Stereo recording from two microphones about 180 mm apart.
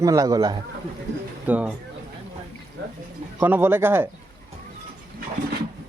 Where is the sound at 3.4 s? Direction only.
10° right (ahead or behind).